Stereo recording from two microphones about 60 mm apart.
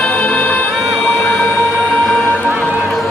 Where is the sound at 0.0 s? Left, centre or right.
Left.